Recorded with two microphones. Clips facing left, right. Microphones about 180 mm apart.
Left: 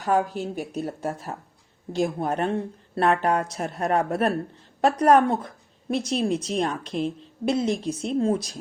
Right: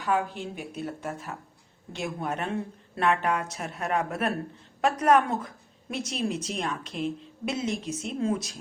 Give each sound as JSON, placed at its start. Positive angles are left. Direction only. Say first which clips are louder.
{"t": 0.0, "sound": "a woman's voice", "louder": "left 4 dB", "side_deg": 40}